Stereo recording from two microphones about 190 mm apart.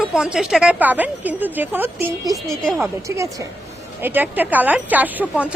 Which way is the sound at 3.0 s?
15° right (ahead or behind).